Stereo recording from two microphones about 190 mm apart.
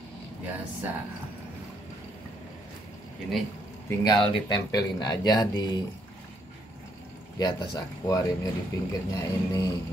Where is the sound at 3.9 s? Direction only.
20° left (ahead or behind).